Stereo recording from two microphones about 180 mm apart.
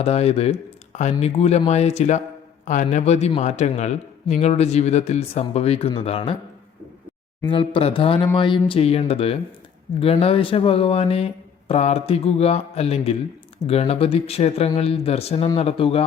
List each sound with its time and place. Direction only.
0.0 s a man's voice: 35° left (ahead or behind)
7.4 s a man's voice: 30° left (ahead or behind)